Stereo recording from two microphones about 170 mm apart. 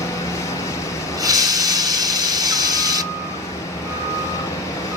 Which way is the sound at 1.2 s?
20° right (ahead or behind).